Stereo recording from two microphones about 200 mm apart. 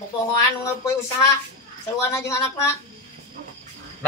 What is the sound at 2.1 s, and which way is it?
Speech, 15° left (ahead or behind).